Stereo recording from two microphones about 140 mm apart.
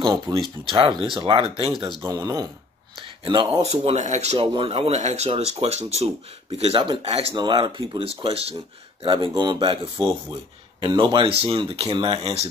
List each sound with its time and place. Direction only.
0.0 s speech: 25° right (ahead or behind)
0.7 s speech: 35° right (ahead or behind)
2.0 s speech: 25° right (ahead or behind); by 7.3 s 45° right (ahead or behind)
7.3 s speech: 35° right (ahead or behind)
9.0 s speech: 35° right (ahead or behind)